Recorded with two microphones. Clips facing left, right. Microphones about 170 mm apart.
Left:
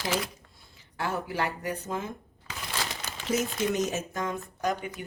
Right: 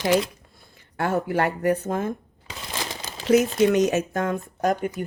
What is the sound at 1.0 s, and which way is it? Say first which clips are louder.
Speech: right 7 dB; 55° right (ahead or behind).